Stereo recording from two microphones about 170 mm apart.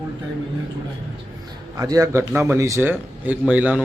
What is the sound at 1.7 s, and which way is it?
A man's voice, 20° right (ahead or behind).